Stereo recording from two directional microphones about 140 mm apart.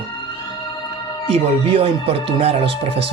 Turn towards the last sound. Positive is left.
turn(degrees=-40)  # may be behind; listen again after turning